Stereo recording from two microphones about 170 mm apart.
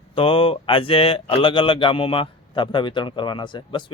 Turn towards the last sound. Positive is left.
turn(degrees=30)  # may be behind; listen again after turning